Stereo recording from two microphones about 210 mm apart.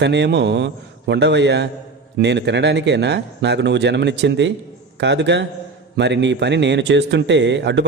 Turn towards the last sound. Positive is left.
turn(degrees=-55)  # may be behind; listen again after turning